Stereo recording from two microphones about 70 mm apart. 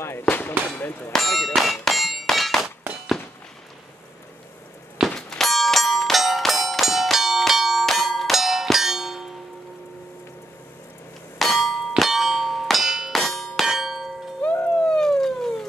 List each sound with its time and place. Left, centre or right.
0.2 s speech: left
1.1 s clang: centre
5.1 s music: centre
11.3 s clang: centre
12.0 s bell: centre
14.4 s music: left
14.8 s police car: centre